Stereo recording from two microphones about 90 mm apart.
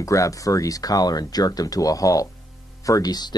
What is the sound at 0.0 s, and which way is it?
Speech, 40° left (ahead or behind).